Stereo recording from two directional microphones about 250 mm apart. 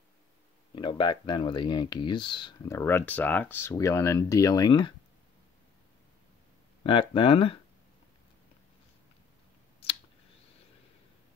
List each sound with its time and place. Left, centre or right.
0.7 s speech: centre
6.8 s speech: centre